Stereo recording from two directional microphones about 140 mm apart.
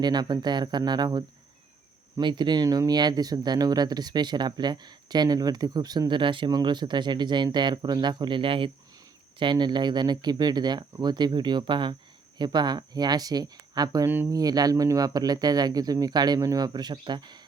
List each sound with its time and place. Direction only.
0.0 s speech: 30° right (ahead or behind)